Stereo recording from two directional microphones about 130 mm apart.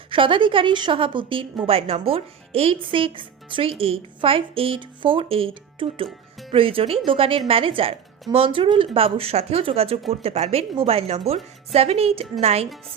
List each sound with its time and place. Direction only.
0.1 s a woman's voice: 40° right (ahead or behind)